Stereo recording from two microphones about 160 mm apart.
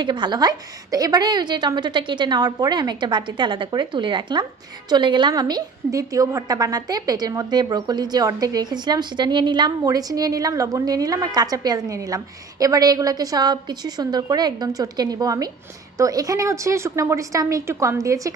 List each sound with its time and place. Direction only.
0.0 s a woman's voice: 30° right (ahead or behind)